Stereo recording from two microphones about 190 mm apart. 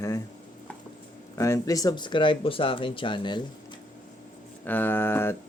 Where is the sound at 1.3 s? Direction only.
15° left (ahead or behind).